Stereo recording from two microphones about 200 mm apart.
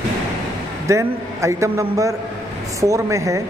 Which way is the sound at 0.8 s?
15° right (ahead or behind).